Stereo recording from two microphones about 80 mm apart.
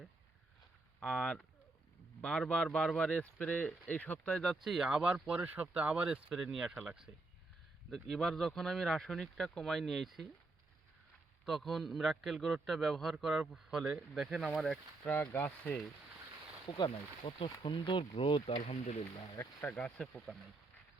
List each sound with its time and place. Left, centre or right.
1.0 s speech: centre
4.3 s speech: centre
4.6 s speech: centre
11.4 s speech: centre
14.6 s speech: centre
15.1 s speech: left
16.6 s speech: left
17.4 s speech: left
19.6 s speech: centre